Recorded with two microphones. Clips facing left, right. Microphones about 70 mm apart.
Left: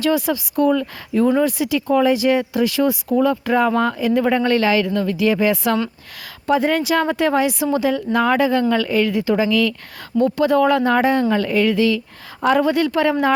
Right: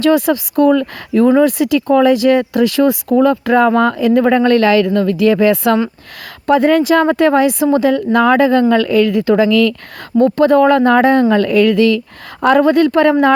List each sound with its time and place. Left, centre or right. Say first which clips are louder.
0.0 s speech: right 7 dB; right
10.2 s speech: right 6 dB; right